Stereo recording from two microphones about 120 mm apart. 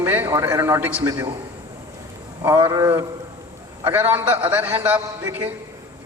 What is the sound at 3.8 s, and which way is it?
A man's voice, 20° right (ahead or behind).